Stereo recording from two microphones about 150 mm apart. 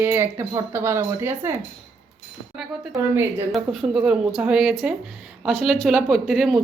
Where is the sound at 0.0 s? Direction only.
15° right (ahead or behind).